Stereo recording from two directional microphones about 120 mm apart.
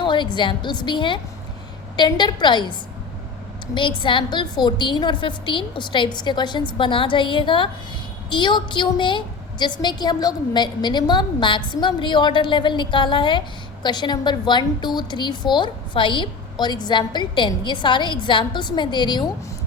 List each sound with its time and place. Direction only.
0.0 s a woman's voice: 40° left (ahead or behind)
3.8 s a woman's voice: 45° left (ahead or behind)